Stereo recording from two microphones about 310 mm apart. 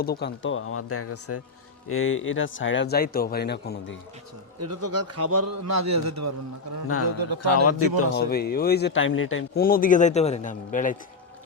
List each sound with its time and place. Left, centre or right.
0.0 s speech: left
4.6 s a man's voice: right
6.8 s speech: left
8.1 s a man's voice: left